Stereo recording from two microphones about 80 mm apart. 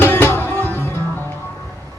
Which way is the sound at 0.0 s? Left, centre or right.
Left.